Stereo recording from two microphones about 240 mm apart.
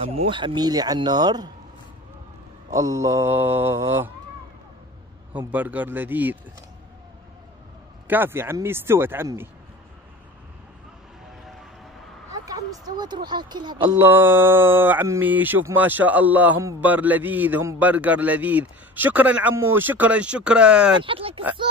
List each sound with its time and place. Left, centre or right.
0.0 s speech: right
2.7 s speech: centre
5.3 s speech: centre
8.1 s speech: centre
12.3 s speech: centre
21.0 s speech: right